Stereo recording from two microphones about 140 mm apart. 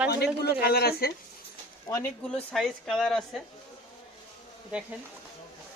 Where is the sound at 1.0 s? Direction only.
90° left.